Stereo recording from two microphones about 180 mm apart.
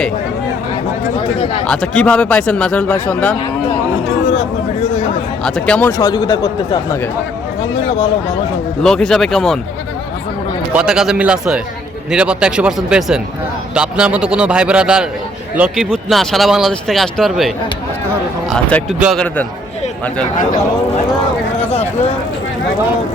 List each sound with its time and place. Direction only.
1.6 s speech: 5° left (ahead or behind)
5.4 s speech: 5° left (ahead or behind)
6.0 s speech: 20° left (ahead or behind)
8.8 s speech: 5° left (ahead or behind)
10.7 s speech: 5° right (ahead or behind)
21.7 s a sound: 35° left (ahead or behind)